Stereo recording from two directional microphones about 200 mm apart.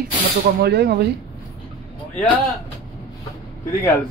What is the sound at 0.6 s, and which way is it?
Speech, 55° right (ahead or behind).